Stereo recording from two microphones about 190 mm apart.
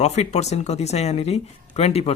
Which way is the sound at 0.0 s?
35° left (ahead or behind).